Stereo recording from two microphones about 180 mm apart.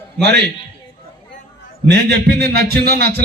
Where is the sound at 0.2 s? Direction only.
65° right (ahead or behind).